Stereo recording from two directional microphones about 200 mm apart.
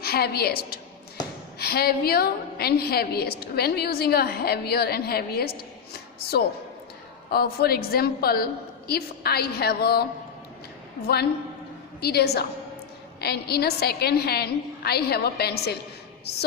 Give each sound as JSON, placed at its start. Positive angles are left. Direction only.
{"t": 0.0, "sound": "a woman's voice", "side_deg": 50}